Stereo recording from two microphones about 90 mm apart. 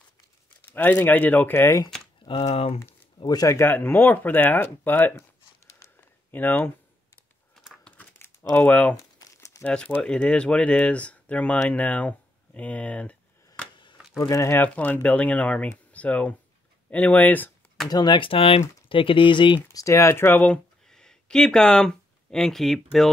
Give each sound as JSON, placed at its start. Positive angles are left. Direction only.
{"t": 0.7, "sound": "speech", "side_deg": 20}
{"t": 2.2, "sound": "speech", "side_deg": 85}
{"t": 3.3, "sound": "speech", "side_deg": 45}
{"t": 3.5, "sound": "speech", "side_deg": 20}
{"t": 6.3, "sound": "speech", "side_deg": 20}
{"t": 8.0, "sound": "crumpling", "side_deg": 30}
{"t": 8.9, "sound": "crumpling", "side_deg": 35}
{"t": 9.6, "sound": "speech", "side_deg": 15}
{"t": 14.3, "sound": "speech", "side_deg": 30}
{"t": 14.6, "sound": "speech", "side_deg": 20}
{"t": 17.8, "sound": "speech", "side_deg": 55}
{"t": 19.7, "sound": "speech", "side_deg": 35}
{"t": 20.4, "sound": "speech", "side_deg": 10}